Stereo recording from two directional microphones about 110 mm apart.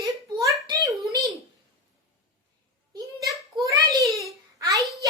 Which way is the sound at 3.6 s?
30° right (ahead or behind).